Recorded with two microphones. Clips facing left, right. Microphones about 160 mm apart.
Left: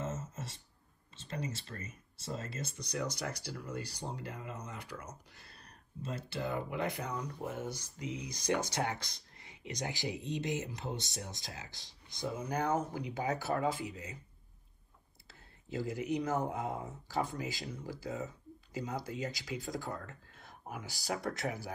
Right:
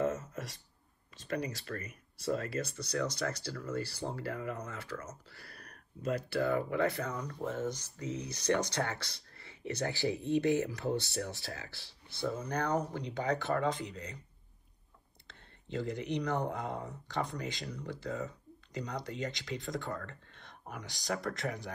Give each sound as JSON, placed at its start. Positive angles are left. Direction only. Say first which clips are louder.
{"t": 1.2, "sound": "a sound", "louder": "right 5 dB", "side_deg": -65}
{"t": 2.8, "sound": "speech", "louder": "right 2 dB", "side_deg": 15}
{"t": 15.2, "sound": "speech", "louder": "right 1 dB", "side_deg": 5}